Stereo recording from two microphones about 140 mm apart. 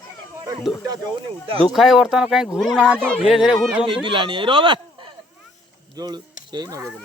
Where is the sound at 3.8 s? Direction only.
35° right (ahead or behind).